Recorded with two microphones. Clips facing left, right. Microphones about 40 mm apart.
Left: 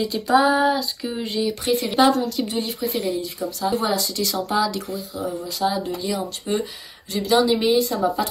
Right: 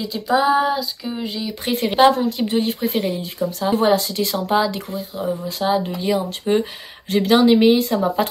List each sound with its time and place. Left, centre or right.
0.0 s female singing: centre
1.7 s a woman's voice: right
4.8 s a woman's voice: right